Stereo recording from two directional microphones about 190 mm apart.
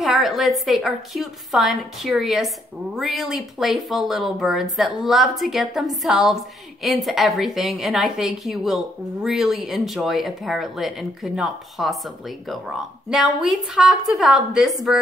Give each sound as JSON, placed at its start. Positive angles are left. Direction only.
{"t": 0.0, "sound": "a woman's voice", "side_deg": 0}